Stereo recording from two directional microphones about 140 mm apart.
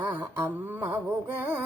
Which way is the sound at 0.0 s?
10° right (ahead or behind).